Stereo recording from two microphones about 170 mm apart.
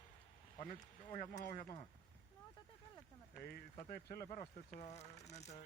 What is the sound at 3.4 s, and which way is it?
Speech, 65° left (ahead or behind).